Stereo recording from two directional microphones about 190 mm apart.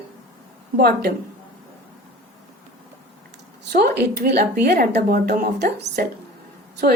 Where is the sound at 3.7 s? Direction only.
55° right (ahead or behind).